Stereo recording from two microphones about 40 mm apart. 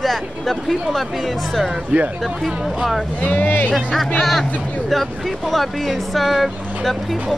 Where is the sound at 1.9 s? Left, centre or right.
Right.